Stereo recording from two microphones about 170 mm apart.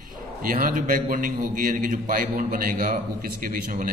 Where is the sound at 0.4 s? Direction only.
55° right (ahead or behind).